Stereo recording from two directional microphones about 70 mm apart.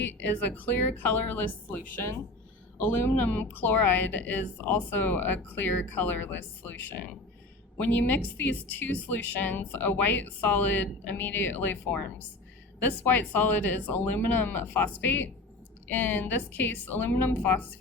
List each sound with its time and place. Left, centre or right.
0.0 s a woman's voice: left
13.1 s a woman's voice: left